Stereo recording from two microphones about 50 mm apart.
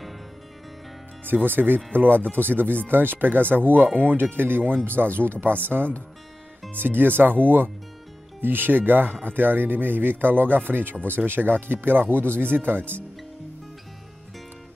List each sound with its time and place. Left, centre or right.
1.2 s speech: right